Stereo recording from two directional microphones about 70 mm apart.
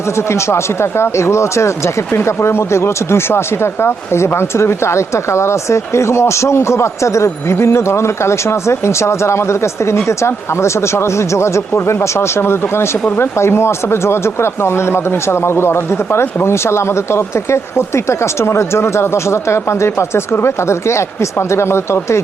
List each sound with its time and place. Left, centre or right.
0.2 s speech: left